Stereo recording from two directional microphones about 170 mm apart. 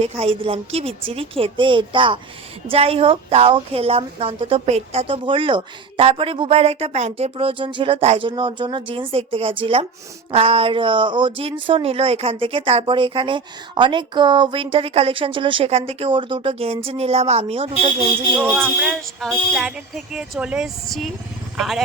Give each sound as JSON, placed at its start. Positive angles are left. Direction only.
{"t": 0.0, "sound": "speech", "side_deg": -35}
{"t": 18.3, "sound": "speech", "side_deg": -10}